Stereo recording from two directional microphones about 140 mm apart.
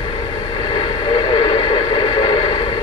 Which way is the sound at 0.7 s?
35° left (ahead or behind).